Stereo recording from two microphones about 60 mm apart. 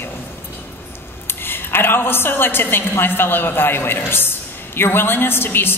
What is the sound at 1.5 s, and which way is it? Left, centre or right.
A woman's voice, left.